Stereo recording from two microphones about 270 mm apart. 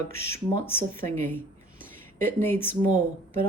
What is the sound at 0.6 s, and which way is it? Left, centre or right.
Speech, centre.